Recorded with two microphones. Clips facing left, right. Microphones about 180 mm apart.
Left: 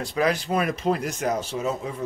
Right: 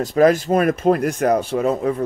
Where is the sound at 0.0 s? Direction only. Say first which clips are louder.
Right 9 dB; 45° right (ahead or behind).